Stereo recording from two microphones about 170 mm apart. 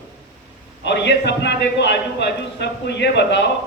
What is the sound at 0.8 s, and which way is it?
A man's voice, 90° left.